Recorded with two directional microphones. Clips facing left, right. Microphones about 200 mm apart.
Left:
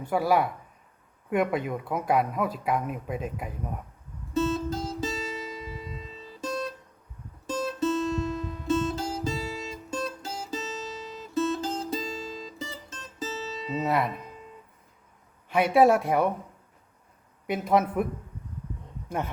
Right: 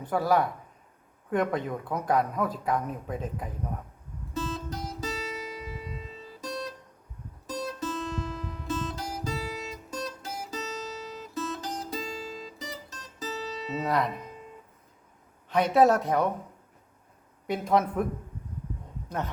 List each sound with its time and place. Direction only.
0.1 s speech: 10° left (ahead or behind)
4.4 s music: 25° left (ahead or behind)
7.4 s guitar: 25° left (ahead or behind)
13.8 s music: 5° left (ahead or behind)
15.4 s speech: 10° left (ahead or behind)
17.4 s speech: 5° left (ahead or behind)